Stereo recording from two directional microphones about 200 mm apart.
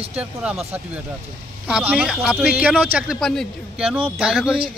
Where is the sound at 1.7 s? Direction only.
5° right (ahead or behind).